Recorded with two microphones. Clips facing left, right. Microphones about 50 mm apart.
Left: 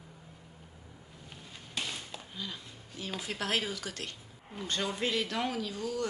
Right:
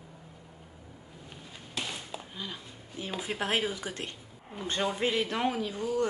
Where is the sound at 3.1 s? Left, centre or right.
Centre.